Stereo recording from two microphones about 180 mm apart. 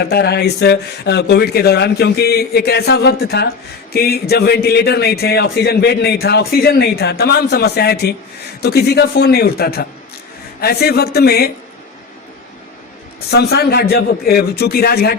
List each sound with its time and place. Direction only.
0.0 s speech: 65° left (ahead or behind)
13.3 s speech: 60° left (ahead or behind)